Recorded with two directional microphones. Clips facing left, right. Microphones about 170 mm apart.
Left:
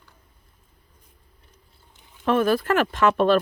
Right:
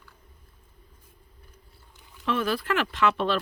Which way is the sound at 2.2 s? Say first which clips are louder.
Left 7 dB; 50° left (ahead or behind).